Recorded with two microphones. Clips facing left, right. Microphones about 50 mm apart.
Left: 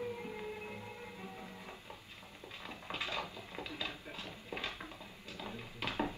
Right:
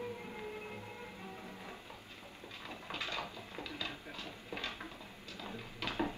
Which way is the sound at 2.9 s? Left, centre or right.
Left.